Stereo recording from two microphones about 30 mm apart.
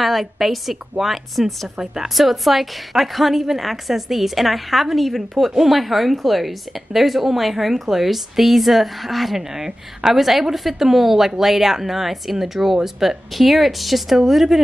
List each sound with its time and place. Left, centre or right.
0.0 s a woman's voice: centre
9.4 s a woman's voice: centre
13.3 s a woman's voice: centre